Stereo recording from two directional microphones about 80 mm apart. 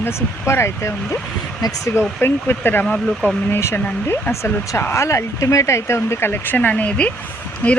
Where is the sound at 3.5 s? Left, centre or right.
Left.